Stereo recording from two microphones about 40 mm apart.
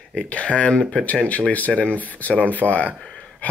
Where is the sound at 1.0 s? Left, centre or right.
Left.